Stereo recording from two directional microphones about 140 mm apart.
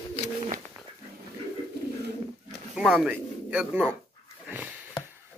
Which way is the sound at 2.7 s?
5° right (ahead or behind).